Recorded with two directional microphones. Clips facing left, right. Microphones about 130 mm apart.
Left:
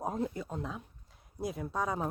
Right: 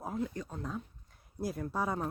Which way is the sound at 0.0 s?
25° left (ahead or behind).